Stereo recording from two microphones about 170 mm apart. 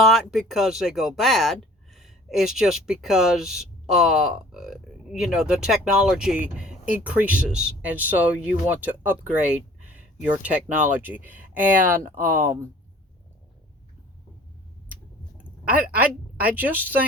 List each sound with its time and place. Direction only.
0.0 s speech: centre (ahead or behind)
15.4 s a woman's voice: 10° right (ahead or behind)